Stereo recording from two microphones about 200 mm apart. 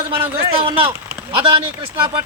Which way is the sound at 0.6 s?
25° right (ahead or behind).